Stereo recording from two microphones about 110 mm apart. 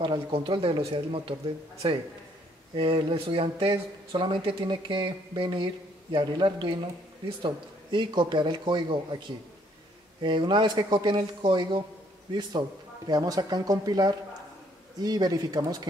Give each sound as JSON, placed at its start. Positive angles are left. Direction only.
{"t": 0.0, "sound": "speech", "side_deg": -45}
{"t": 10.2, "sound": "speech", "side_deg": -45}